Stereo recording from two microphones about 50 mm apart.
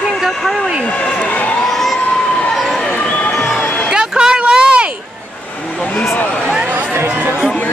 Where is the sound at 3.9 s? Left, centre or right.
Centre.